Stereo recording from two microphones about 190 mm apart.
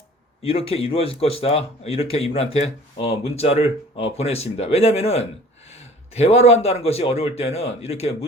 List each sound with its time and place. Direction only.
0.4 s a man's voice: 30° left (ahead or behind)